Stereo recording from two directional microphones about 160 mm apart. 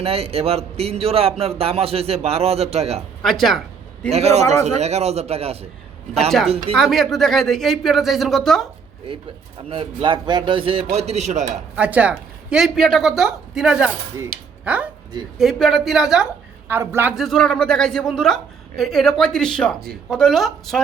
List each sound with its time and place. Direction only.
0.0 s speech: 40° right (ahead or behind)
3.2 s a woman's voice: centre (ahead or behind)
4.1 s speech: 40° right (ahead or behind)
6.7 s a woman's voice: centre (ahead or behind)
9.6 s speech: 30° right (ahead or behind); by 11.6 s 45° right (ahead or behind)
11.8 s a woman's voice: 10° right (ahead or behind)
16.6 s a woman's voice: 15° right (ahead or behind)
17.2 s a woman's voice: centre (ahead or behind)